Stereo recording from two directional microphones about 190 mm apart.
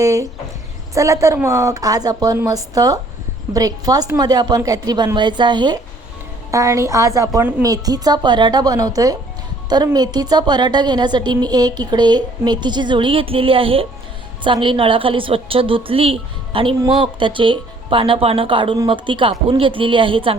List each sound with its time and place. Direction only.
0.0 s a woman's voice: 15° right (ahead or behind)